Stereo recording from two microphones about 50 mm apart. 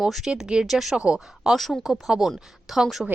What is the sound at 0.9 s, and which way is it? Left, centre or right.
Speech, centre.